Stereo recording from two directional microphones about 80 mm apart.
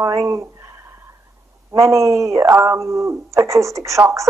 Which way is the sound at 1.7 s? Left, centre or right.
Right.